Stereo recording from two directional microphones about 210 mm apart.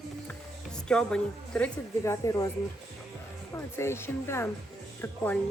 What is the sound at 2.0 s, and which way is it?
Speech, 15° left (ahead or behind).